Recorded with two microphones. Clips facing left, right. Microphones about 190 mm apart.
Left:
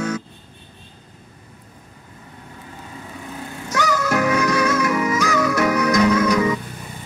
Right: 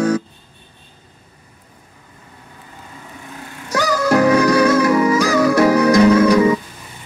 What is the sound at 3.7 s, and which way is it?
Music, 35° right (ahead or behind).